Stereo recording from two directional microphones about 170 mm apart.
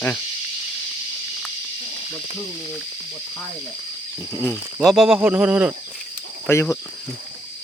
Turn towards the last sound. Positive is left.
turn(degrees=15)  # may be behind; listen again after turning